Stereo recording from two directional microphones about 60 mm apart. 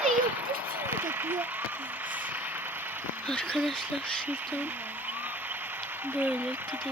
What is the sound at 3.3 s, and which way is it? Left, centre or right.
Speech, left.